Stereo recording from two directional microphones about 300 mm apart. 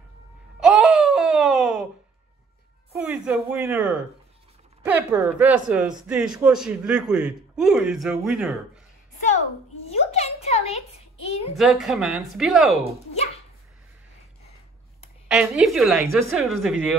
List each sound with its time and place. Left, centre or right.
0.6 s wail: centre
2.9 s speech: centre
9.8 s a sound: left
11.5 s speech: centre
15.2 s speech: centre